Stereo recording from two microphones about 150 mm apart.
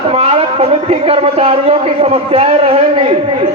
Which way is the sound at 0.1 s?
40° right (ahead or behind).